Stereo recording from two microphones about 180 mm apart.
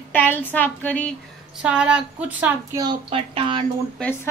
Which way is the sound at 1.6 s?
5° right (ahead or behind).